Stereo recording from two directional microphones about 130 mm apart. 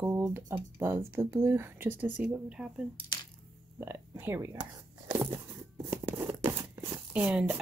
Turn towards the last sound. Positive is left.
turn(degrees=-10)  # may be behind; listen again after turning